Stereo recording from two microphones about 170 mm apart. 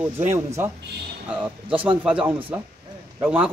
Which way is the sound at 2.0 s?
10° right (ahead or behind).